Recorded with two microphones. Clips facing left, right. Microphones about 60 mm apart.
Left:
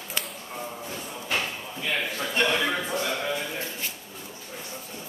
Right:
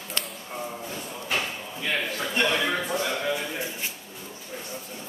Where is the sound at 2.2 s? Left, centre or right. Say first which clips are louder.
Left 1 dB; centre.